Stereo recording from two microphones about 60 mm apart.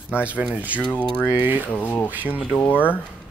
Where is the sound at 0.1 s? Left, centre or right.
Right.